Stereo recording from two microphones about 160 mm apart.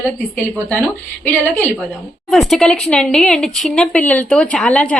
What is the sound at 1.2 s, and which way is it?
A woman's voice, 10° left (ahead or behind).